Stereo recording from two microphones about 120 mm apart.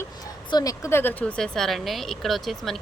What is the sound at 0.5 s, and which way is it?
Speech, 30° left (ahead or behind).